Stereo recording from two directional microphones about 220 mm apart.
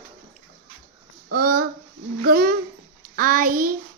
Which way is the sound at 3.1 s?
40° right (ahead or behind).